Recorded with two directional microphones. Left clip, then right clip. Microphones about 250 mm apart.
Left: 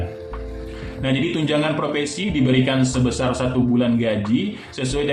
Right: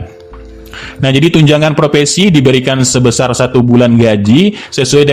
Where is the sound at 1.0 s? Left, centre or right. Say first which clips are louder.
Right 13 dB; right.